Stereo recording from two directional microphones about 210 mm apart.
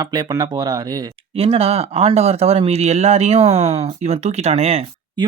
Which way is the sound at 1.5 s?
30° right (ahead or behind).